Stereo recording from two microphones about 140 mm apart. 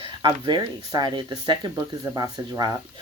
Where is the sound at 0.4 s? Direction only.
30° right (ahead or behind).